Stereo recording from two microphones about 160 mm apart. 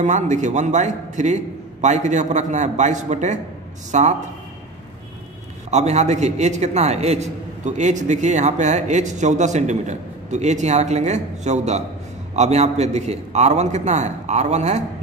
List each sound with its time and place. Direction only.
0.0 s a man's voice: 50° right (ahead or behind)
5.7 s a man's voice: 45° right (ahead or behind)